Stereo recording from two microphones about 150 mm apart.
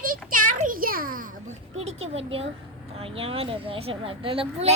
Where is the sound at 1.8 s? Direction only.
45° right (ahead or behind).